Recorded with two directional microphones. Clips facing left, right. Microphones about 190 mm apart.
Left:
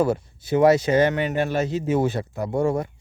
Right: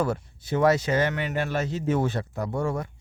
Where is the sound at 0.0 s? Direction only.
10° left (ahead or behind).